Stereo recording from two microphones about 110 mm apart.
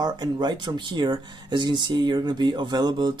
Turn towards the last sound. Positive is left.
turn(degrees=-40)  # may be behind; listen again after turning